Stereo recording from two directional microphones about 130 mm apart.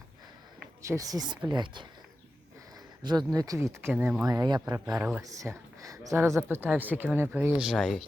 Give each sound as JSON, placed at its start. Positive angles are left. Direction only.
{"t": 0.8, "sound": "speech", "side_deg": -25}
{"t": 3.0, "sound": "speech", "side_deg": -35}
{"t": 4.3, "sound": "speech", "side_deg": -30}
{"t": 4.9, "sound": "speech", "side_deg": -10}
{"t": 5.2, "sound": "speech", "side_deg": -25}
{"t": 7.8, "sound": "speech", "side_deg": 5}